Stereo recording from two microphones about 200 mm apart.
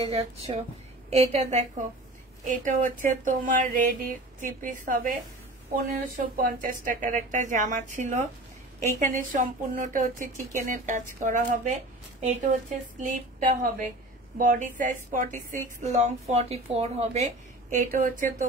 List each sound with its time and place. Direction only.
0.0 s a woman's voice: 30° right (ahead or behind)